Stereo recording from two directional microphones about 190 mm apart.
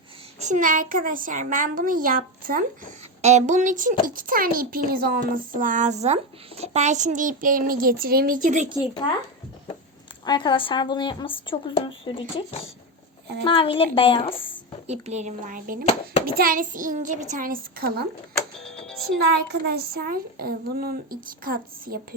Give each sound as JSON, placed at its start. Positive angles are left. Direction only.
{"t": 0.3, "sound": "a woman's voice", "side_deg": -40}
{"t": 3.2, "sound": "a woman's voice", "side_deg": -35}
{"t": 10.2, "sound": "a woman's voice", "side_deg": 25}
{"t": 14.8, "sound": "a woman's voice", "side_deg": -35}
{"t": 18.9, "sound": "music", "side_deg": 0}
{"t": 19.2, "sound": "a woman's voice", "side_deg": -60}